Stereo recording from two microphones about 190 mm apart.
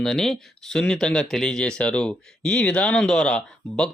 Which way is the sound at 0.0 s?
Centre (ahead or behind).